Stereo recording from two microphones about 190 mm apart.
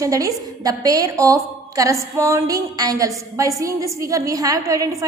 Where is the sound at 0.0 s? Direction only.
15° right (ahead or behind).